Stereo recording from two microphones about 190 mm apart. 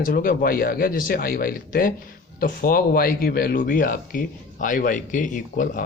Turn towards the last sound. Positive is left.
turn(degrees=45)  # may be behind; listen again after turning